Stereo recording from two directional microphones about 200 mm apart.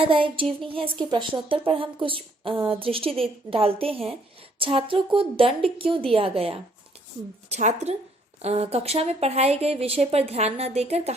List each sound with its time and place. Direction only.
0.0 s a woman's voice: 25° right (ahead or behind)